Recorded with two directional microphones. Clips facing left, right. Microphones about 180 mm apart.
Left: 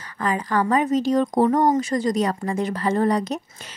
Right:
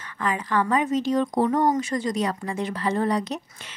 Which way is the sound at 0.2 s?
40° left (ahead or behind).